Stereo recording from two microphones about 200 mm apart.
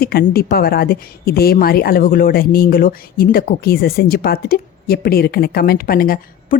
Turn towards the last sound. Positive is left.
turn(degrees=45)  # may be behind; listen again after turning